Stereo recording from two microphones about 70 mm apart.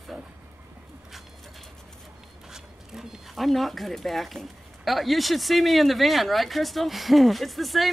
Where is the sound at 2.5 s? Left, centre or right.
Centre.